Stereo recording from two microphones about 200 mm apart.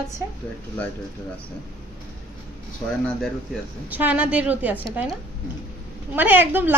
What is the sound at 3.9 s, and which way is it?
A woman's voice, 10° right (ahead or behind).